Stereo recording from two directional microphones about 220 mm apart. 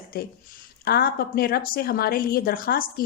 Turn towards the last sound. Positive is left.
turn(degrees=40)  # may be behind; listen again after turning